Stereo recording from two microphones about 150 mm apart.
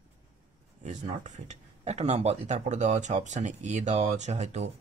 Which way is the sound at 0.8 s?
50° right (ahead or behind).